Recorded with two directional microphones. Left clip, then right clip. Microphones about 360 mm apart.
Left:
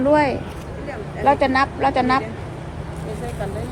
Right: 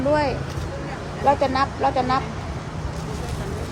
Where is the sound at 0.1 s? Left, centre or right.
Centre.